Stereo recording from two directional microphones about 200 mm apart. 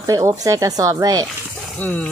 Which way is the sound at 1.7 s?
5° left (ahead or behind).